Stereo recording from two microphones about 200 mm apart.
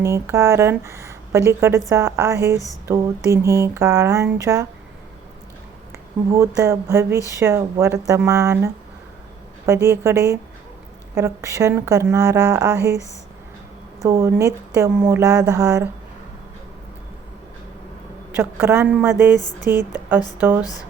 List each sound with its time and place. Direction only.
0.0 s speech: 15° right (ahead or behind)
6.6 s speech: 15° right (ahead or behind)
9.8 s speech: 15° right (ahead or behind)
18.3 s speech: 10° right (ahead or behind)